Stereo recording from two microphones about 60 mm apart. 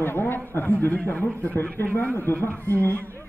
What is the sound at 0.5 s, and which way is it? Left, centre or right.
A man's voice, left.